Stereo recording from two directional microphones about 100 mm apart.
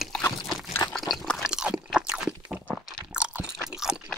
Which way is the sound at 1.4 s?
5° right (ahead or behind).